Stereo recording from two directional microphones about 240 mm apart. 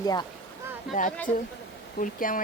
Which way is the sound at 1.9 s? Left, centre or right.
Left.